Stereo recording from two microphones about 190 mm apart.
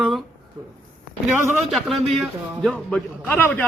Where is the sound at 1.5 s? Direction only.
Centre (ahead or behind).